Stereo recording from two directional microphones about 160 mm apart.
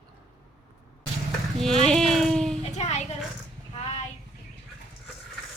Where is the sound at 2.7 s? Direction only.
40° left (ahead or behind).